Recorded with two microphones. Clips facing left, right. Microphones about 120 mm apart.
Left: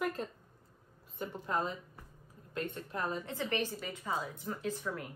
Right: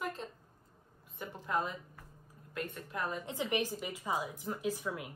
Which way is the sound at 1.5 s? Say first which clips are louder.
Right 1 dB; 35° left (ahead or behind).